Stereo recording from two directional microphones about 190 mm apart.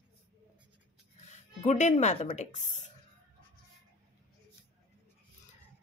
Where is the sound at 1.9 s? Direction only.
35° left (ahead or behind).